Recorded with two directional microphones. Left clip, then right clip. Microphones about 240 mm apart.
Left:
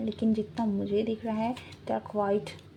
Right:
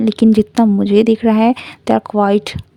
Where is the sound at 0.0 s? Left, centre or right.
Right.